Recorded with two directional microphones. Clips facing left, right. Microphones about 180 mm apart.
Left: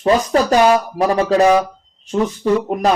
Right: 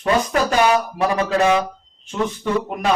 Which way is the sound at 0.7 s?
35° left (ahead or behind).